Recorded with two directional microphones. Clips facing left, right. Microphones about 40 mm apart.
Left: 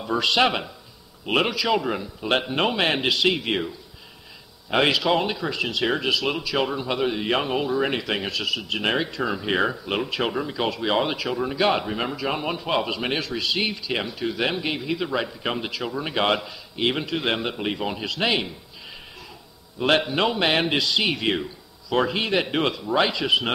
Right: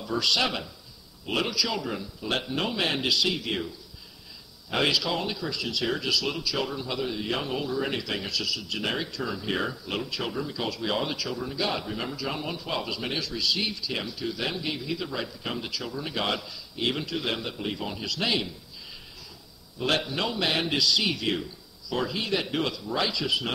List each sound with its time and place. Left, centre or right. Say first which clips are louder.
0.0 s speech: left 6 dB; left
19.8 s speech: left 6 dB; left